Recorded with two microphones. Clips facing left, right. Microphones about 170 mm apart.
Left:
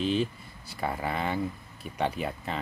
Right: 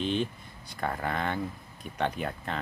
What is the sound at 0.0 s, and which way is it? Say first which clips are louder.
Speech: left 2 dB; 5° left (ahead or behind).